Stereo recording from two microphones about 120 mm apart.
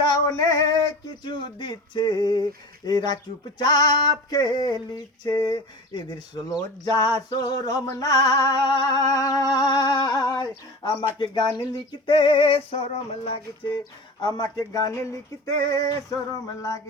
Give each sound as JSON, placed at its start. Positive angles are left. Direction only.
{"t": 0.0, "sound": "female singing", "side_deg": 35}
{"t": 12.0, "sound": "a sound", "side_deg": 45}
{"t": 14.2, "sound": "speech", "side_deg": 35}
{"t": 16.3, "sound": "speech", "side_deg": 25}